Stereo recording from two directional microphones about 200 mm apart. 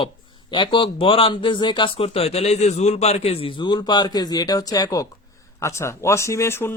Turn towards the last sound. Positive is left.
turn(degrees=10)  # may be behind; listen again after turning